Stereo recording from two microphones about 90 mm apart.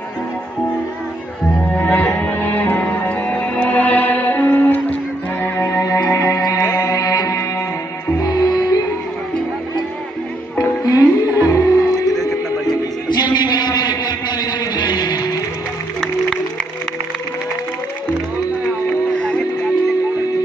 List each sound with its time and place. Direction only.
1.8 s music: 15° left (ahead or behind)
6.1 s music: 40° left (ahead or behind)
10.6 s music: 40° left (ahead or behind)
11.2 s music: 20° right (ahead or behind)
11.5 s music: 45° left (ahead or behind)
16.0 s music: 5° left (ahead or behind)
19.1 s music: 10° left (ahead or behind)